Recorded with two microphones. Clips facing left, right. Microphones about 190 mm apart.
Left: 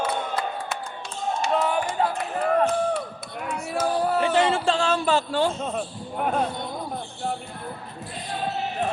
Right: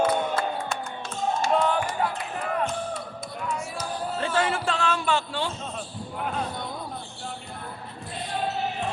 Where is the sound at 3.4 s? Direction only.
60° left (ahead or behind).